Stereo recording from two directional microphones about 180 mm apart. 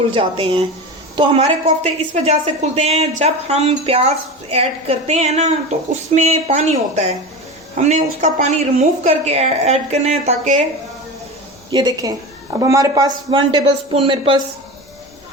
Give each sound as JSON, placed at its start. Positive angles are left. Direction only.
{"t": 0.1, "sound": "a woman's voice", "side_deg": -30}
{"t": 11.7, "sound": "speech", "side_deg": -20}